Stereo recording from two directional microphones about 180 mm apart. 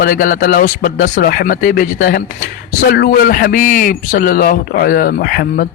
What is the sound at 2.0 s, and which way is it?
Speech, 75° left (ahead or behind).